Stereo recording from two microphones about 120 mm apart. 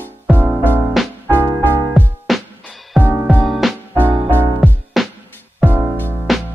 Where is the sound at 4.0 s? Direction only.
15° right (ahead or behind).